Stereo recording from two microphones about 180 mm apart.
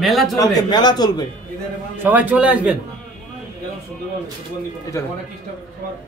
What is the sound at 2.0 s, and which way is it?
Speech, 10° right (ahead or behind).